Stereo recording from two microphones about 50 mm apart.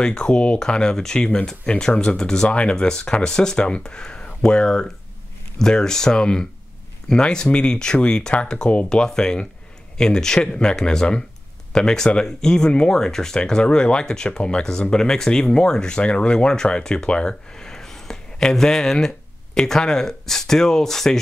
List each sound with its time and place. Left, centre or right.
0.0 s speech: centre